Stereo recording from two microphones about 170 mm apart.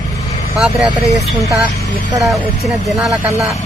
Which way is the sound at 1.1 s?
20° right (ahead or behind).